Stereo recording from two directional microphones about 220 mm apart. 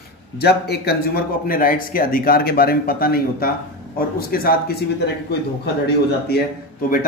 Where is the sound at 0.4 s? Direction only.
45° left (ahead or behind).